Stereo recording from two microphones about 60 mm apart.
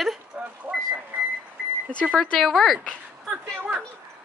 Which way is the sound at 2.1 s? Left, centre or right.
Centre.